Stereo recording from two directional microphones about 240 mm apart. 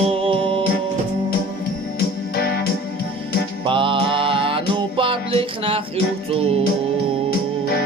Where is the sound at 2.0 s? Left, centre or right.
Left.